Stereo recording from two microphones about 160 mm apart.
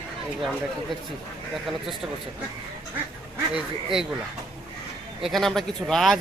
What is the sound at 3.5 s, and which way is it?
Speech, 5° right (ahead or behind).